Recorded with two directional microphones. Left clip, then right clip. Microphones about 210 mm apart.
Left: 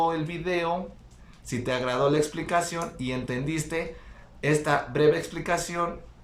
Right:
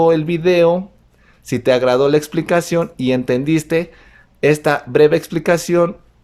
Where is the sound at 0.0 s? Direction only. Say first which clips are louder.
Right 13 dB; 50° right (ahead or behind).